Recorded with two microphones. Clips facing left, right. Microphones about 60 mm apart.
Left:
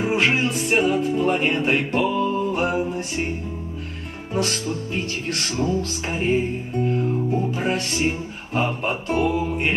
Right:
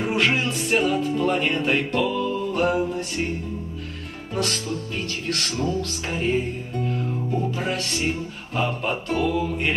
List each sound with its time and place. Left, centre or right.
0.0 s music: centre
4.3 s music: left
6.9 s speech: left